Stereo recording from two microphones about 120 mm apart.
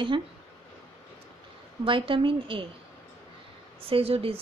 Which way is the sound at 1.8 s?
45° right (ahead or behind).